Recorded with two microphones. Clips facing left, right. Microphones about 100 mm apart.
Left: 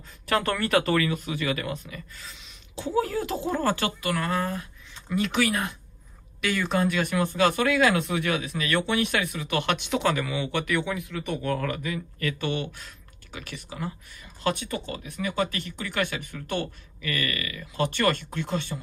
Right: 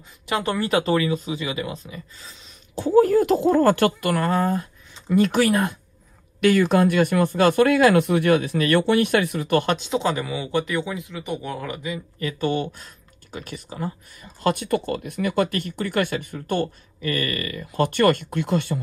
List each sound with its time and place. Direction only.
0.3 s speech: 20° right (ahead or behind)
2.7 s speech: 50° right (ahead or behind)
6.4 s speech: 60° right (ahead or behind); by 12.4 s 25° right (ahead or behind)
12.4 s speech: 35° right (ahead or behind)
14.5 s speech: 50° right (ahead or behind)
17.6 s speech: 50° right (ahead or behind)